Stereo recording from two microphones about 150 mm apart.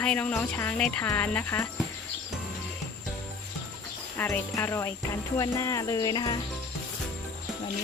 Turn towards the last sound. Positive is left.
turn(degrees=25)  # may be behind; listen again after turning